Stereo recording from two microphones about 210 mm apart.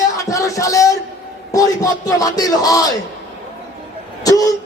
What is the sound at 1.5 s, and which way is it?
Speech, 15° left (ahead or behind).